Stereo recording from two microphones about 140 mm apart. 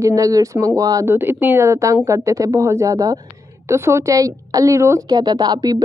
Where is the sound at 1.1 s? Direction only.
15° right (ahead or behind).